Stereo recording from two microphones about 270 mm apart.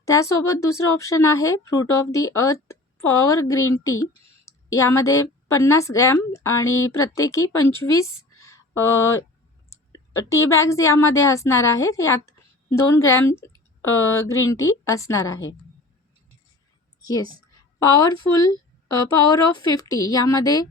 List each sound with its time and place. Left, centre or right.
0.0 s speech: centre
4.4 s a sound: centre
5.5 s speech: centre
6.7 s speech: left
7.0 s a woman's voice: centre
10.2 s speech: left
10.5 s speech: centre
13.8 s speech: left
14.3 s speech: centre
17.1 s speech: centre